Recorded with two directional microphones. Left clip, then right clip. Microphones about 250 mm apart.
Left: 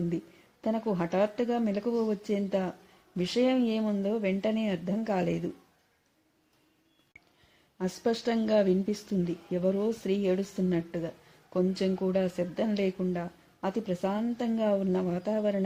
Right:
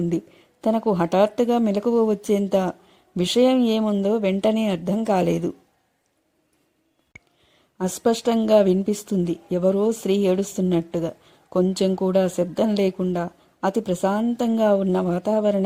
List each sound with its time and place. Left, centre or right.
0.6 s speech: right
7.8 s speech: right